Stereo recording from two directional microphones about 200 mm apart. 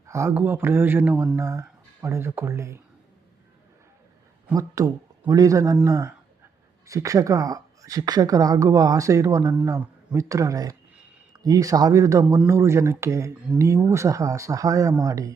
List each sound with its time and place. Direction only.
0.1 s speech: 15° right (ahead or behind)
4.4 s speech: 15° right (ahead or behind)